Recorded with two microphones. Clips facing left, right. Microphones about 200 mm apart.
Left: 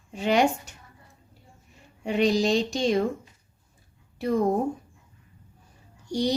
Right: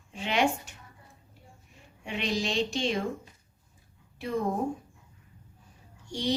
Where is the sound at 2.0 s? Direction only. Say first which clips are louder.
Left 9 dB; 40° left (ahead or behind).